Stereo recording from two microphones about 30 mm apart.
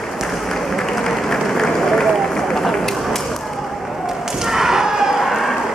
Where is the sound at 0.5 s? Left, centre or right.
Centre.